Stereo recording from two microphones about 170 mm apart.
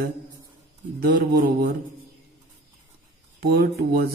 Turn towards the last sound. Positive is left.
turn(degrees=-65)  # may be behind; listen again after turning